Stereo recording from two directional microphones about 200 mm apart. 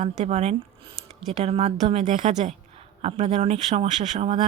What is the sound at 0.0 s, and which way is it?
Speech, 35° right (ahead or behind).